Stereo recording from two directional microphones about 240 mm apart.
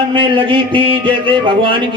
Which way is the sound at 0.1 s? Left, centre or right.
Right.